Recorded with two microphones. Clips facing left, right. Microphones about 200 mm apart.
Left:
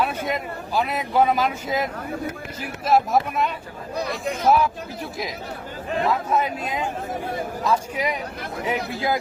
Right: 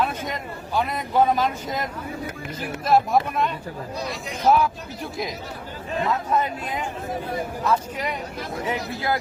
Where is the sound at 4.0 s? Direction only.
55° left (ahead or behind).